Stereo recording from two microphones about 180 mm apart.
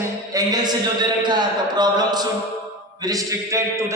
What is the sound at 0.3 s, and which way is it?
A man's voice, 20° right (ahead or behind).